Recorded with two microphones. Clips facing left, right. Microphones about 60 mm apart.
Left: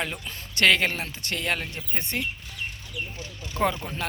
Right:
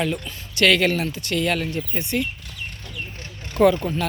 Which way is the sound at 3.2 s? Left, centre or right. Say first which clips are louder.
Right 7 dB; right.